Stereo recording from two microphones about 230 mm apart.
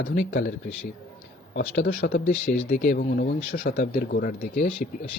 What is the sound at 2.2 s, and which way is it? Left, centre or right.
Speech, left.